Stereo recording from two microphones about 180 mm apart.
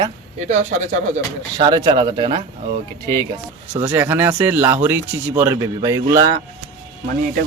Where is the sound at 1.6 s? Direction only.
25° right (ahead or behind).